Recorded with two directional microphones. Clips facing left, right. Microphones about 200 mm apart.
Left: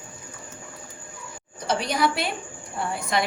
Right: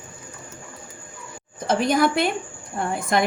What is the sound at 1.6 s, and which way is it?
A woman's voice, 50° right (ahead or behind).